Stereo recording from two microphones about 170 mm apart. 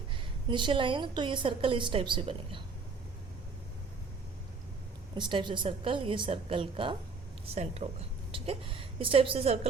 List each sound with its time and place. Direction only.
0.5 s a woman's voice: 30° right (ahead or behind)
5.1 s a woman's voice: 25° right (ahead or behind)